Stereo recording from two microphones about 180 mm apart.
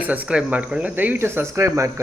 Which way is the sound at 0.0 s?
10° right (ahead or behind).